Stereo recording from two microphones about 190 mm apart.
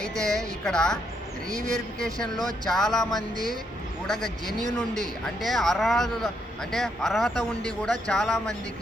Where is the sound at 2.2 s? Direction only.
Centre (ahead or behind).